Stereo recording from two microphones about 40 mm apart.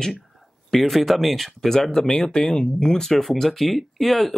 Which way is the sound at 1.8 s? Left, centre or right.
Centre.